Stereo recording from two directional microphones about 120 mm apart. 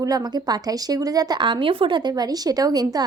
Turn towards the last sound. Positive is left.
turn(degrees=-35)  # may be behind; listen again after turning